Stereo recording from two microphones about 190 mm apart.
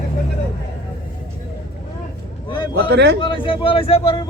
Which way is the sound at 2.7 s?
65° right (ahead or behind).